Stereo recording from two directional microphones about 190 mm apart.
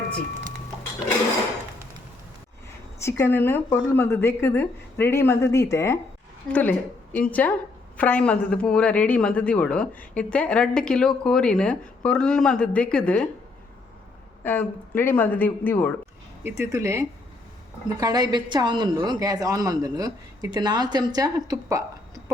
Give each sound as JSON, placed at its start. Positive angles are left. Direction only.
{"t": 3.0, "sound": "speech", "side_deg": 15}
{"t": 14.4, "sound": "speech", "side_deg": 10}
{"t": 16.4, "sound": "a woman's voice", "side_deg": -15}